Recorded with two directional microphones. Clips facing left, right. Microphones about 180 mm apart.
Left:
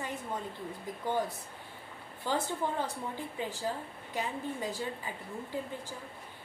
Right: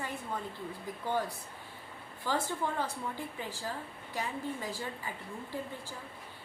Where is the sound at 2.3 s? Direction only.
20° left (ahead or behind).